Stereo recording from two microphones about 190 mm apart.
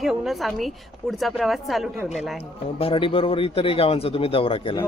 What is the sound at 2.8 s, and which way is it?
A man's voice, 30° left (ahead or behind).